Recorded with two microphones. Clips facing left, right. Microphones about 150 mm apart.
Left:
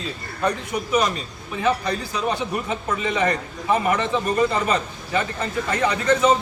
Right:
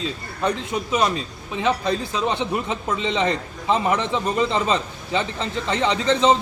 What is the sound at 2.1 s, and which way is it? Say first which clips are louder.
A man's voice: right 1 dB; 25° right (ahead or behind).